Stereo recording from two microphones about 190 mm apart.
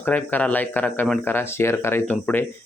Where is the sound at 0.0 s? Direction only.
10° left (ahead or behind).